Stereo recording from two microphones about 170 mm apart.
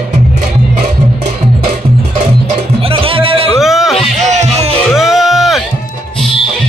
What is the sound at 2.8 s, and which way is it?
Music, 30° right (ahead or behind).